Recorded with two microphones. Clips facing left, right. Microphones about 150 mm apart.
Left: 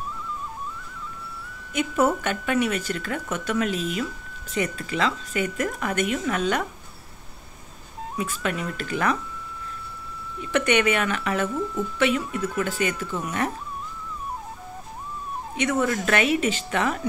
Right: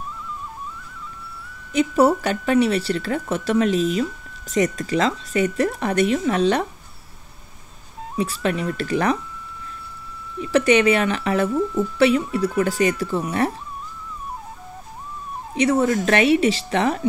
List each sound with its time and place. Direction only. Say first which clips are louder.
1.7 s speech: right 5 dB; 35° right (ahead or behind)
8.2 s speech: right 5 dB; 35° right (ahead or behind)
10.5 s speech: right 5 dB; 30° right (ahead or behind)
15.5 s speech: right 6 dB; 35° right (ahead or behind)